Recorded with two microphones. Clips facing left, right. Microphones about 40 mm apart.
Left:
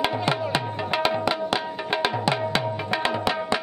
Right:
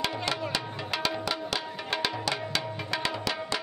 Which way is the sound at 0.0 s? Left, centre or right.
Left.